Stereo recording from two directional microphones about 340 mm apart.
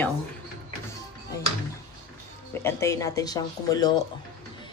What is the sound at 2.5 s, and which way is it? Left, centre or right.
Speech, centre.